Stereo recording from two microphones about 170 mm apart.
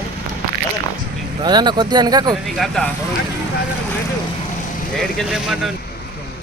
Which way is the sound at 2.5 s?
Centre (ahead or behind).